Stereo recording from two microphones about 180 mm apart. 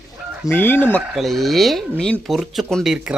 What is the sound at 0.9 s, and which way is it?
Speech, centre (ahead or behind).